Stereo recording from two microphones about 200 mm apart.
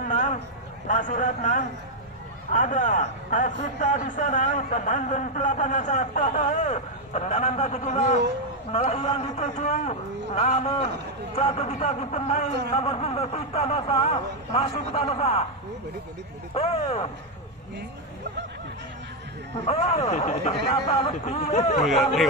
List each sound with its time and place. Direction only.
0.1 s a sound: 40° left (ahead or behind)
0.8 s a man's voice: 40° left (ahead or behind)
16.5 s a man's voice: 30° left (ahead or behind)
19.6 s a man's voice: 30° left (ahead or behind)
21.8 s speech: centre (ahead or behind)